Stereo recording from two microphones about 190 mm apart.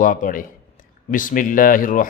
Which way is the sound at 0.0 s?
45° left (ahead or behind).